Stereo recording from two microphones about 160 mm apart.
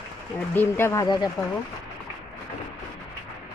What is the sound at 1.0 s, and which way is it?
Speech, 25° left (ahead or behind).